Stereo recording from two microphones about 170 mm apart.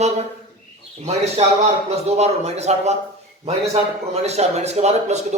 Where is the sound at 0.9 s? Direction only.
40° right (ahead or behind).